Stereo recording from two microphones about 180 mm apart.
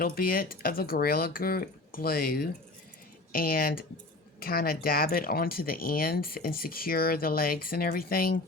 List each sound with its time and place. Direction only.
0.0 s speech: 55° left (ahead or behind)